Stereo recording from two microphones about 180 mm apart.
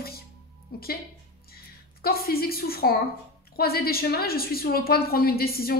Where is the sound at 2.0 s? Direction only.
55° left (ahead or behind).